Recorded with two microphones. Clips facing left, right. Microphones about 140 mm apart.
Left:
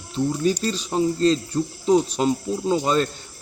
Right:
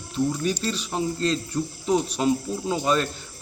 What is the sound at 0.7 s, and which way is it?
Speech, 35° left (ahead or behind).